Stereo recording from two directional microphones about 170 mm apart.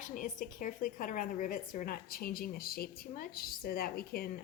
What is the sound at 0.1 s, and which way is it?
A woman's voice, 50° left (ahead or behind).